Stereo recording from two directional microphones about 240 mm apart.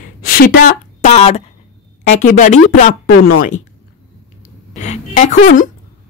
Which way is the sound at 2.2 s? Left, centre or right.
Left.